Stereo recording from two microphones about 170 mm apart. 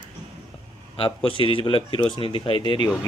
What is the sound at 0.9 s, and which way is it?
Speech, 30° left (ahead or behind).